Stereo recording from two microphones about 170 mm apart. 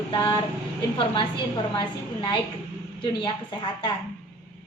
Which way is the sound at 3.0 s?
30° left (ahead or behind).